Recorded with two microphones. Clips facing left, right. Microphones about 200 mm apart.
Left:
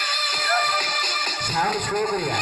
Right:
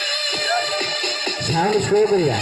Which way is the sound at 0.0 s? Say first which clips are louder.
Right 5 dB; 30° right (ahead or behind).